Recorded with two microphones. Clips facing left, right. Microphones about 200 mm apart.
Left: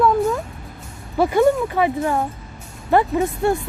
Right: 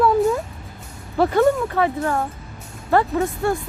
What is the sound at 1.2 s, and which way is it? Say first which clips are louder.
Speech: even; 10° left (ahead or behind).